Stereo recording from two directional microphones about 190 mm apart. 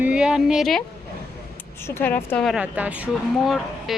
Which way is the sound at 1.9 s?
10° left (ahead or behind).